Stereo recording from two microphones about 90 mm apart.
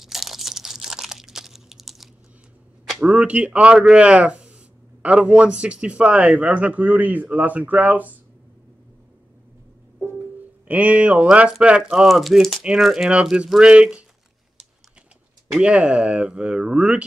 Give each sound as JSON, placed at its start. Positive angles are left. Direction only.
{"t": 0.0, "sound": "crunch", "side_deg": -5}
{"t": 2.9, "sound": "speech", "side_deg": -10}
{"t": 10.7, "sound": "speech", "side_deg": -15}
{"t": 15.5, "sound": "speech", "side_deg": -10}